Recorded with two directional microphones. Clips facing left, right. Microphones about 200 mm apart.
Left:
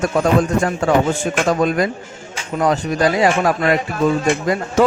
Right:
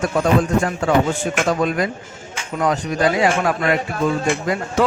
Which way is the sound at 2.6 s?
40° left (ahead or behind).